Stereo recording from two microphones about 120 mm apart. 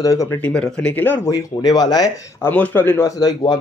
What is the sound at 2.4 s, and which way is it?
Speech, 15° left (ahead or behind).